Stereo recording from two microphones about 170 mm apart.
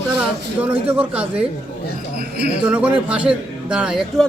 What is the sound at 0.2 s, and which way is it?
Speech, 10° right (ahead or behind).